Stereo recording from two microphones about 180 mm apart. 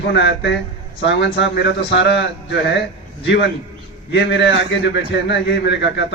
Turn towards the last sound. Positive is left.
turn(degrees=75)  # may be behind; listen again after turning